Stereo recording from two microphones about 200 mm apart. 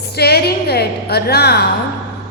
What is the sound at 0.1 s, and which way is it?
A woman's voice, 55° left (ahead or behind).